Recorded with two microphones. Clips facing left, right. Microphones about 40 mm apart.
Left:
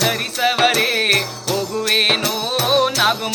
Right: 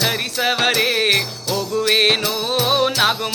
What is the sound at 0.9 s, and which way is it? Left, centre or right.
Jingle bell, centre.